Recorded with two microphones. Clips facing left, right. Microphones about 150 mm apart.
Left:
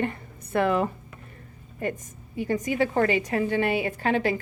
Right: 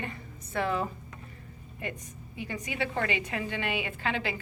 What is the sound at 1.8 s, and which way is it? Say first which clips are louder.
A woman's voice: left 8 dB; 45° left (ahead or behind).